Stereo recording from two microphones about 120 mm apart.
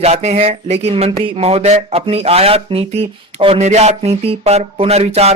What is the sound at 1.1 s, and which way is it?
Speech, 45° right (ahead or behind).